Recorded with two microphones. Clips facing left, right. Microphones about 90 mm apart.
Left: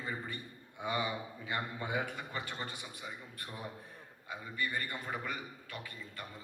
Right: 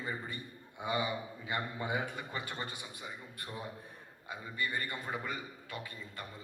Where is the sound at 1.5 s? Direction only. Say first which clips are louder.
Right 1 dB; 25° right (ahead or behind).